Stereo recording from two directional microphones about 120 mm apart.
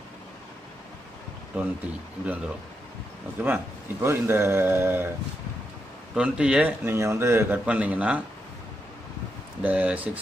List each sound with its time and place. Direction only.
1.5 s speech: 15° right (ahead or behind)
3.4 s a man's voice: 20° right (ahead or behind)
6.1 s speech: 5° right (ahead or behind)
9.6 s speech: 15° right (ahead or behind)